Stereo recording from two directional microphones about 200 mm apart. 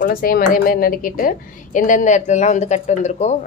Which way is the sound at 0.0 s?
45° left (ahead or behind).